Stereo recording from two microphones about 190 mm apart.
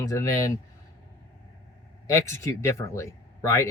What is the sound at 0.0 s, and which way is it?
Speech, 15° left (ahead or behind).